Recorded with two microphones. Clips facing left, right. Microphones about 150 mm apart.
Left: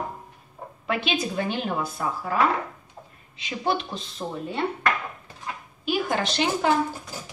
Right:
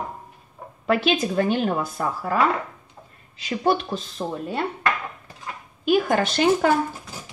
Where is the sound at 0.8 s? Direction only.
45° right (ahead or behind).